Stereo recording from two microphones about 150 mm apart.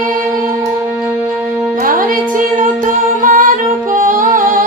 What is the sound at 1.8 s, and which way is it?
Music, 65° right (ahead or behind).